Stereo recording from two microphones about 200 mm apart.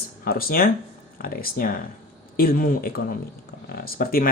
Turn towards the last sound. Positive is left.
turn(degrees=45)  # may be behind; listen again after turning